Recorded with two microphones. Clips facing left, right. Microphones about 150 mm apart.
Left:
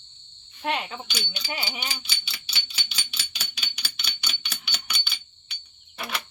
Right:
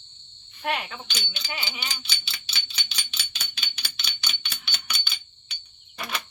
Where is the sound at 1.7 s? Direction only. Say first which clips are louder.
Left 2 dB; 10° left (ahead or behind).